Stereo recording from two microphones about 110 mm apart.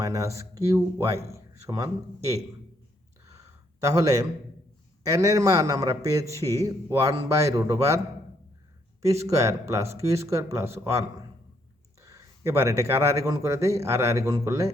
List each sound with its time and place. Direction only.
0.0 s a man's voice: 30° right (ahead or behind)
3.2 s a sound: 30° right (ahead or behind)
5.0 s a man's voice: 30° right (ahead or behind)